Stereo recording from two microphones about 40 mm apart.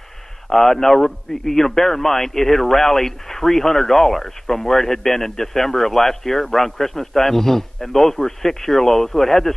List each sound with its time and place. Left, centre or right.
0.5 s a man's voice: centre